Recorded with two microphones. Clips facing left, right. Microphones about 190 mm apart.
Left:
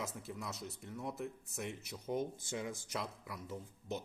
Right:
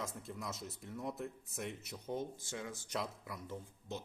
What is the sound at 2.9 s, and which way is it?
Speech, centre (ahead or behind).